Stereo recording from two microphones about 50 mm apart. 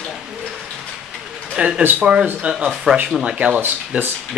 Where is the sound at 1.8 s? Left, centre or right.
Right.